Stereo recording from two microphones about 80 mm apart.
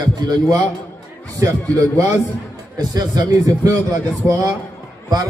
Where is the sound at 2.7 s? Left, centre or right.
Right.